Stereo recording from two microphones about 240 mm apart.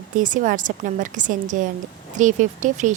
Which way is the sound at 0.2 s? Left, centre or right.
Right.